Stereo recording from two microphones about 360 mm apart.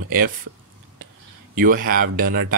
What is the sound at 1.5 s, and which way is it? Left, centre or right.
Speech, right.